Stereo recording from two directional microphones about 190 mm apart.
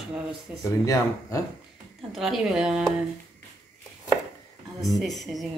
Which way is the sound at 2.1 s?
Centre (ahead or behind).